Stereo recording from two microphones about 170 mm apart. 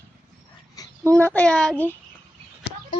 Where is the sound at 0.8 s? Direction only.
20° left (ahead or behind).